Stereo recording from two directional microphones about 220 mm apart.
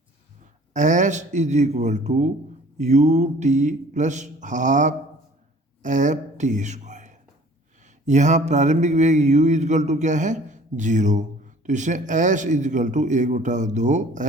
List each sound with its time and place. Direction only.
0.7 s mantra: 35° right (ahead or behind)
5.8 s speech: 35° right (ahead or behind)
8.0 s mantra: 35° right (ahead or behind)